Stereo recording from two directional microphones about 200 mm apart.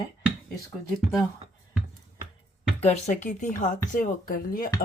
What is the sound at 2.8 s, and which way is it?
Speech, 35° left (ahead or behind).